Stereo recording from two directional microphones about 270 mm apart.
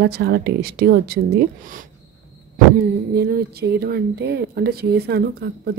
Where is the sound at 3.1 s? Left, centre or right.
Right.